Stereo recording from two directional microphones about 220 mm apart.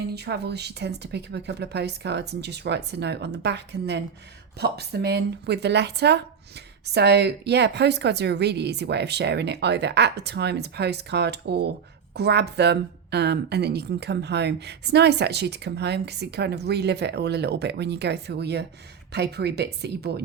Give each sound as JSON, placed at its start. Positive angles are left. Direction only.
{"t": 0.1, "sound": "a woman's voice", "side_deg": -50}